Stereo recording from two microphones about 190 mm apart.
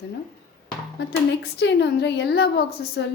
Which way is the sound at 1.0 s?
65° left (ahead or behind).